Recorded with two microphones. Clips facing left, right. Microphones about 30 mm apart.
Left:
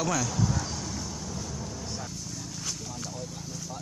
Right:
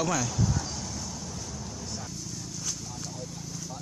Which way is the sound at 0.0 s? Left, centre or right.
Centre.